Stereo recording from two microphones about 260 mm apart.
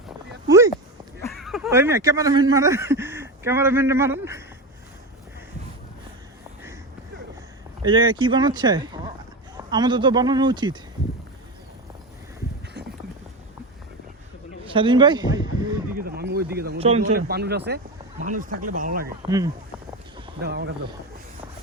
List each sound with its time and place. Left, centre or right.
0.4 s a sound: centre
1.3 s speech: centre
7.9 s speech: centre
14.6 s speech: centre
16.0 s a sound: right
16.7 s speech: right
17.1 s speech: right
19.2 s speech: centre
20.4 s speech: right